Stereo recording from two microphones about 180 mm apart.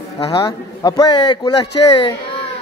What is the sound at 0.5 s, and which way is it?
A man's voice, 20° left (ahead or behind).